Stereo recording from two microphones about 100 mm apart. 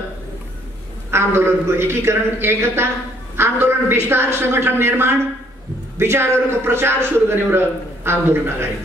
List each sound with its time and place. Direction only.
1.1 s a man's voice: 25° right (ahead or behind)